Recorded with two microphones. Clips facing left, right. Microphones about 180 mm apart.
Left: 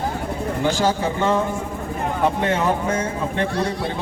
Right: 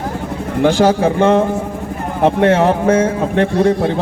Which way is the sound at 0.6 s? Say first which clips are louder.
Right 9 dB; 70° right (ahead or behind).